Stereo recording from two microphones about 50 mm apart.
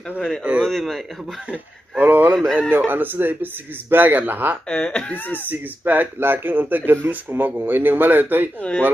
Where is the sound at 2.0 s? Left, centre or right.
Right.